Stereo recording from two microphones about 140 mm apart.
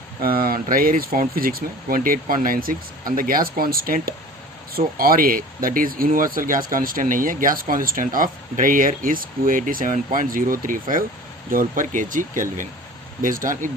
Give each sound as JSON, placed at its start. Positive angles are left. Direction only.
{"t": 0.2, "sound": "speech", "side_deg": -90}